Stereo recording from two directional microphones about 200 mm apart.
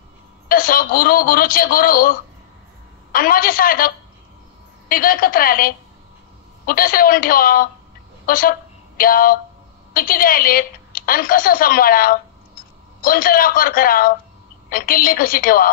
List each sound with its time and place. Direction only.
0.5 s a woman's voice: 45° left (ahead or behind)